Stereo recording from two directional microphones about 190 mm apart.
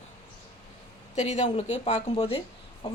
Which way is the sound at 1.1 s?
35° left (ahead or behind).